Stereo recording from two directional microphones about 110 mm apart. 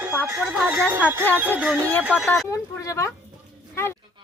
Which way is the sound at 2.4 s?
30° left (ahead or behind).